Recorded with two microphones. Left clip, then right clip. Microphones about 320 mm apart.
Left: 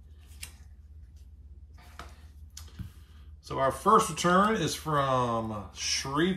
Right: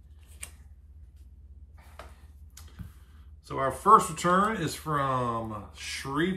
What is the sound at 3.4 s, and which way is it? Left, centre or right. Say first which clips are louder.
Speech: left 2 dB; centre.